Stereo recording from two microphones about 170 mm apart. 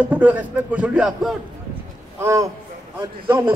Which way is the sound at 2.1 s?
15° right (ahead or behind).